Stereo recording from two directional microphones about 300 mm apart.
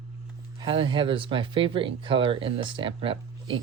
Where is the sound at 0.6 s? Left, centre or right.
Centre.